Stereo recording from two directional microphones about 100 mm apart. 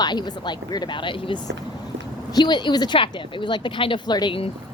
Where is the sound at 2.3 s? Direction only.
45° left (ahead or behind).